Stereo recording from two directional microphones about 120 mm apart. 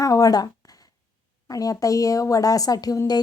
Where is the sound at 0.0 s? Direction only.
30° left (ahead or behind).